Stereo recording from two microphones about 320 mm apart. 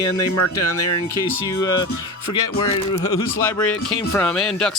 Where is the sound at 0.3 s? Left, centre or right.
Left.